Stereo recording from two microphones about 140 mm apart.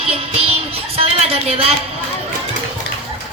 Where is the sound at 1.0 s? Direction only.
45° right (ahead or behind).